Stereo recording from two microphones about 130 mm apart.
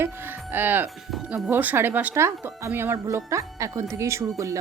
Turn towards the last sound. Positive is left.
turn(degrees=-20)  # may be behind; listen again after turning